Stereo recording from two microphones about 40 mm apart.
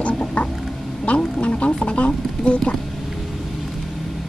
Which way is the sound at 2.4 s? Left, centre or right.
Left.